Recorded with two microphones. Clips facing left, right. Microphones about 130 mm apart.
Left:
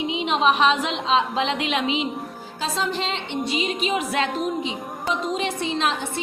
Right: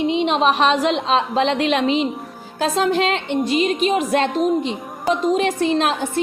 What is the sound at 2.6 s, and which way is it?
Speech, 55° right (ahead or behind).